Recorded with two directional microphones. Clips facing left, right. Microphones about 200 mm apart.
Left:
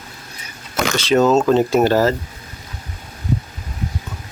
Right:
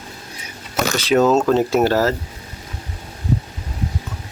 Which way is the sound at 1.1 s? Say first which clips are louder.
Left 1 dB; 5° right (ahead or behind).